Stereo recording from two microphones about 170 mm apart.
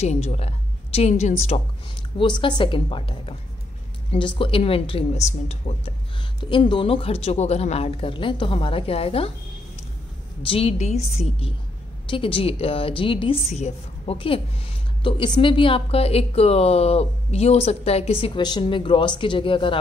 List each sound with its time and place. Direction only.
0.0 s a woman's voice: 40° left (ahead or behind)
10.4 s a woman's voice: 35° left (ahead or behind)